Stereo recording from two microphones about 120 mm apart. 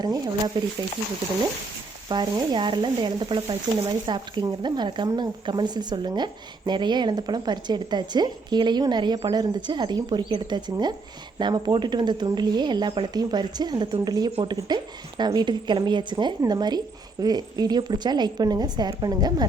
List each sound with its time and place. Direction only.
0.0 s speech: 35° right (ahead or behind)
2.0 s speech: 40° right (ahead or behind)